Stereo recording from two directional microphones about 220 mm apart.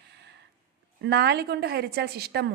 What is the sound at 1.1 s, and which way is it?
Speech, 50° right (ahead or behind).